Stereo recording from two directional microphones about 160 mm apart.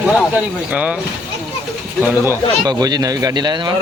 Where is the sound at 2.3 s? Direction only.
25° right (ahead or behind).